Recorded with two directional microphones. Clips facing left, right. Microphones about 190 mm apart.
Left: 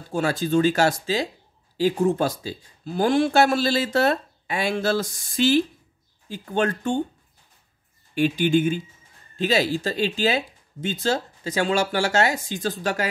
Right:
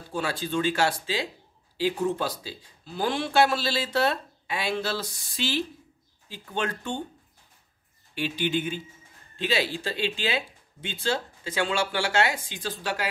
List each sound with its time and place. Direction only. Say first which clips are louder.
0.1 s speech: left 7 dB; 45° left (ahead or behind)
8.1 s speech: left 8 dB; 45° left (ahead or behind)